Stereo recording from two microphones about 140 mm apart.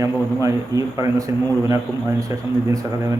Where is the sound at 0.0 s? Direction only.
25° right (ahead or behind).